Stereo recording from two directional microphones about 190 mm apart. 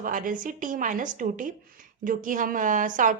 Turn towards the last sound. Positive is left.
turn(degrees=-45)  # may be behind; listen again after turning